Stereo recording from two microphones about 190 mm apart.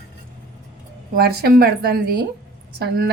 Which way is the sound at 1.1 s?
55° right (ahead or behind).